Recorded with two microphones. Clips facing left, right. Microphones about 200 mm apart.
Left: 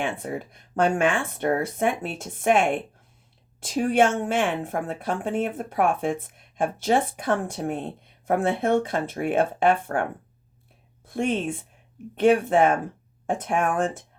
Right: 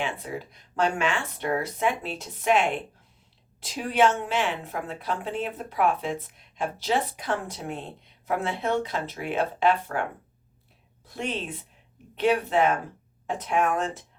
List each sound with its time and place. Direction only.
0.0 s a woman's voice: 50° left (ahead or behind)